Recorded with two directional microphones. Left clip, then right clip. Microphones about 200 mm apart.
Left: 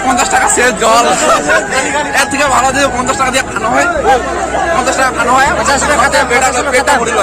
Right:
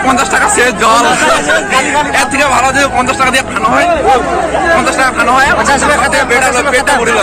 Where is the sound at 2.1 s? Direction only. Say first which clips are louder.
Left 1 dB; 20° left (ahead or behind).